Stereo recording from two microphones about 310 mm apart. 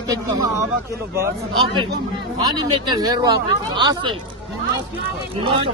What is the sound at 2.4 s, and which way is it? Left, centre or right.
Speech, centre.